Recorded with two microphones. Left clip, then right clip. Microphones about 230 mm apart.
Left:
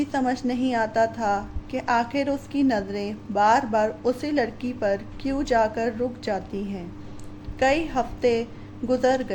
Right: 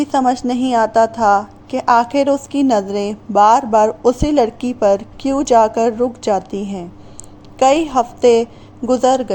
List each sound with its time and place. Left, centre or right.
0.3 s a woman's voice: right